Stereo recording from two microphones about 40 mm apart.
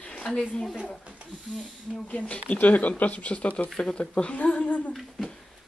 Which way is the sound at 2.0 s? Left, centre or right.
Left.